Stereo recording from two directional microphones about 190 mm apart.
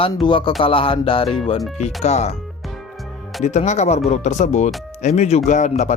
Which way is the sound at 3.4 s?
35° left (ahead or behind).